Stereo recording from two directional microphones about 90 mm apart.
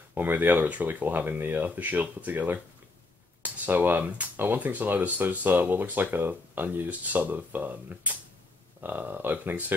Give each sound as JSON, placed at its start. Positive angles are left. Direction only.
{"t": 0.1, "sound": "speech", "side_deg": -20}